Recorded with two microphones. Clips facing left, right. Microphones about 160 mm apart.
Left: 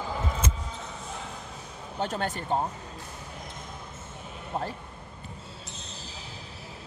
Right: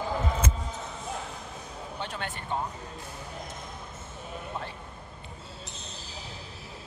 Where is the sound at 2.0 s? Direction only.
40° left (ahead or behind).